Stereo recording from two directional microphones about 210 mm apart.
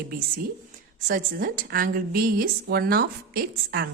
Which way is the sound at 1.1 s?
40° right (ahead or behind).